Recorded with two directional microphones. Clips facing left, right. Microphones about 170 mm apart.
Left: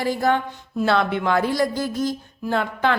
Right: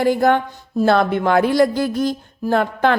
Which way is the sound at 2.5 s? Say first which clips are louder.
Right 5 dB; 50° right (ahead or behind).